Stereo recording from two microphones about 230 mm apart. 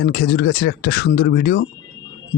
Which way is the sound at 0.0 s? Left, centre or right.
Left.